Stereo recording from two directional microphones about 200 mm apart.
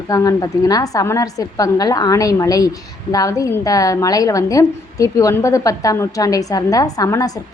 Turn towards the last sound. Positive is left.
turn(degrees=15)  # may be behind; listen again after turning